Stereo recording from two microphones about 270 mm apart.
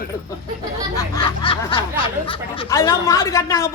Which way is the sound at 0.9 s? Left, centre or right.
Centre.